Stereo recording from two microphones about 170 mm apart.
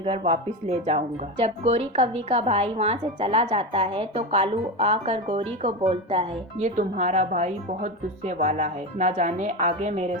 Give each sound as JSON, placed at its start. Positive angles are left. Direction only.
{"t": 0.0, "sound": "speech", "side_deg": -35}